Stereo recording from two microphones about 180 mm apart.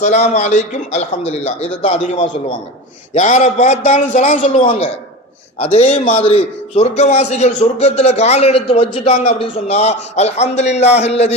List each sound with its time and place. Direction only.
0.0 s a man's voice: 40° left (ahead or behind)
4.6 s a man's voice: 30° left (ahead or behind)